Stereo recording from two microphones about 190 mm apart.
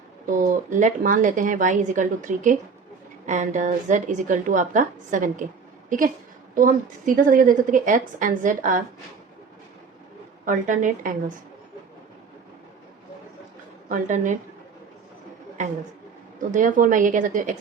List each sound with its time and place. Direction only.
0.3 s a woman's voice: 40° right (ahead or behind)
6.5 s a woman's voice: 45° right (ahead or behind)
10.4 s a woman's voice: 40° right (ahead or behind)
13.8 s a woman's voice: 40° right (ahead or behind)
16.5 s a woman's voice: 45° right (ahead or behind)